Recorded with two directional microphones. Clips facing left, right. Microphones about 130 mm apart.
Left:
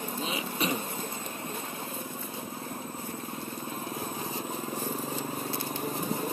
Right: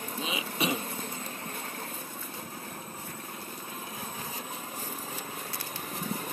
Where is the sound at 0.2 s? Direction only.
10° right (ahead or behind).